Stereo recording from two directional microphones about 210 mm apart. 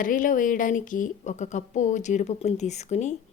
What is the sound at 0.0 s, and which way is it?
A woman's voice, 40° left (ahead or behind).